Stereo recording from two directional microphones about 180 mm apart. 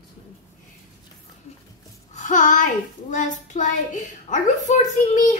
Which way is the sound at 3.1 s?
45° left (ahead or behind).